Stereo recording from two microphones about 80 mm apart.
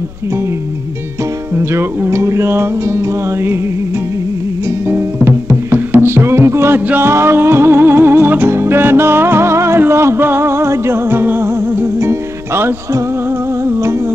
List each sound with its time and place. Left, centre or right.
1.5 s music: right
4.6 s music: right